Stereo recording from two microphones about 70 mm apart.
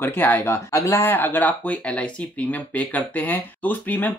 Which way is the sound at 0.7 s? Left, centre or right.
Left.